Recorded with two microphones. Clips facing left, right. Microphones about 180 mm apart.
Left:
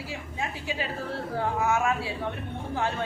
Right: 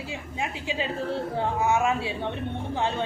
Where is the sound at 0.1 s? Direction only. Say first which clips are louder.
Right 2 dB; 20° right (ahead or behind).